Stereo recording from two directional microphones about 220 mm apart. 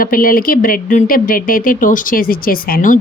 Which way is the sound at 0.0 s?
40° left (ahead or behind).